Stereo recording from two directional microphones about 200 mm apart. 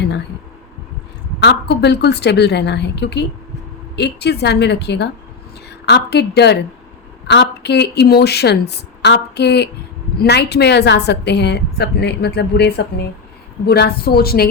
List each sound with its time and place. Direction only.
1.4 s a woman's voice: 55° left (ahead or behind)